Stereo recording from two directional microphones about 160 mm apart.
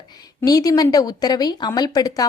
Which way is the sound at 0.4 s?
25° left (ahead or behind).